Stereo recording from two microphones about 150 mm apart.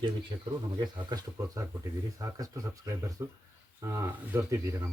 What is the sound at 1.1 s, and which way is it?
Speech, 20° right (ahead or behind).